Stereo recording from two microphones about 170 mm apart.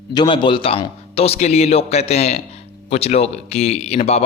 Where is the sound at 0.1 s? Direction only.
25° left (ahead or behind).